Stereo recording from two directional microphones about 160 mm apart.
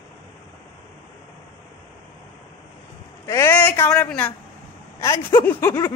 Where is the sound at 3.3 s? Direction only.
15° left (ahead or behind).